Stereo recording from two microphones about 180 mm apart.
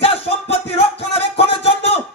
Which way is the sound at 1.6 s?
35° left (ahead or behind).